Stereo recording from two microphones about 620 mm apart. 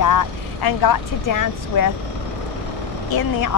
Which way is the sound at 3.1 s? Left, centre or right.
Left.